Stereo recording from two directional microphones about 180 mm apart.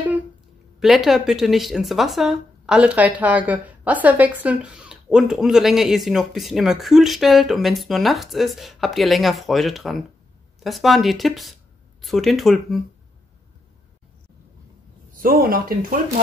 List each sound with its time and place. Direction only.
0.7 s speech: centre (ahead or behind)
15.1 s speech: 55° right (ahead or behind)